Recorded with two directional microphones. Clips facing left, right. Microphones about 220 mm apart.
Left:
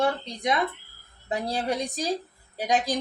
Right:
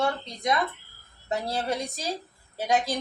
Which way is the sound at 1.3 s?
15° left (ahead or behind).